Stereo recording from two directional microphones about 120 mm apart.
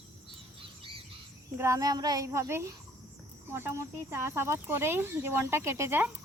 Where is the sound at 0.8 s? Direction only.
50° right (ahead or behind).